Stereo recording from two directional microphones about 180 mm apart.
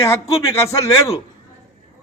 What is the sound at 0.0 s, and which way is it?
A man's voice, 15° left (ahead or behind).